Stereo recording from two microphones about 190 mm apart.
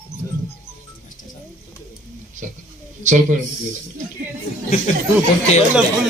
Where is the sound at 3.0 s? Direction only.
40° right (ahead or behind).